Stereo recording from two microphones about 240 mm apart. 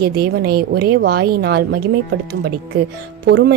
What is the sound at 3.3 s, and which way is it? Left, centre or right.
Speech, right.